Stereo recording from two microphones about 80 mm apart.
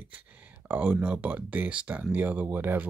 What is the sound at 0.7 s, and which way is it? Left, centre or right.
Speech, centre.